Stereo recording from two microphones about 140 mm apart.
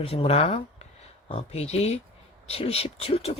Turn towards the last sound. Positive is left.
turn(degrees=45)  # may be behind; listen again after turning